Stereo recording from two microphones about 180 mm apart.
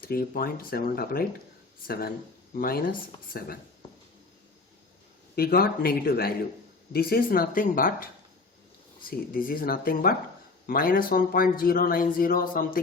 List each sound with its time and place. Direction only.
0.0 s speech: 55° left (ahead or behind)
5.3 s a man's voice: 55° left (ahead or behind)